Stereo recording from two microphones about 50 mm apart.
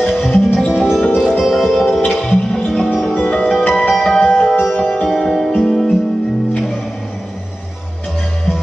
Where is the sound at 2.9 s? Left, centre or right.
Centre.